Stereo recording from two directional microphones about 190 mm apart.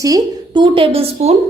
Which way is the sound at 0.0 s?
20° right (ahead or behind).